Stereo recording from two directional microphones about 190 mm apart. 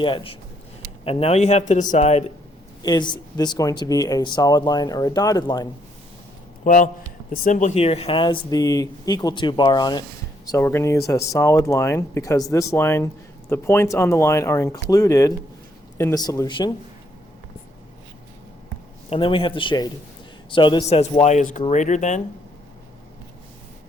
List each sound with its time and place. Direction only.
0.0 s speech: 25° left (ahead or behind)
2.8 s speech: 20° left (ahead or behind)
6.7 s speech: 45° left (ahead or behind); by 16.7 s 25° left (ahead or behind)
19.1 s speech: 30° left (ahead or behind)
21.0 s speech: 35° left (ahead or behind)